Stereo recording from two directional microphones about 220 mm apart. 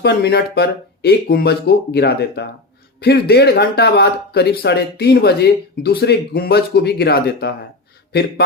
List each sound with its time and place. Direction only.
0.0 s speech: 45° left (ahead or behind)